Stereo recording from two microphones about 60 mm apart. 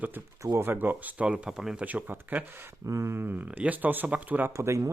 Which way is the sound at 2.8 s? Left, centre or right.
Right.